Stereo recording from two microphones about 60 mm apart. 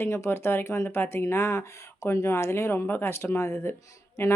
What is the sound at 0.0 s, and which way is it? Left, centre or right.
Speech, left.